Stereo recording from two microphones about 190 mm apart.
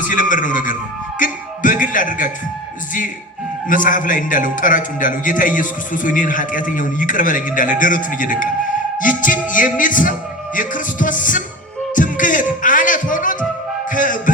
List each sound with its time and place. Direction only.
0.1 s a man's voice: 45° left (ahead or behind)
1.2 s music: 45° left (ahead or behind)
3.7 s a man's voice: 45° left (ahead or behind)
9.0 s music: 45° left (ahead or behind)